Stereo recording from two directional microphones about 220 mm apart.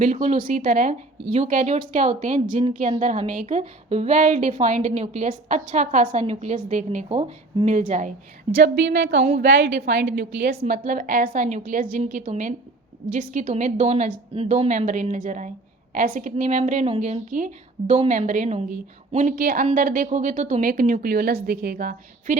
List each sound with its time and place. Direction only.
0.0 s a woman's voice: 30° right (ahead or behind)
8.5 s a woman's voice: 50° right (ahead or behind)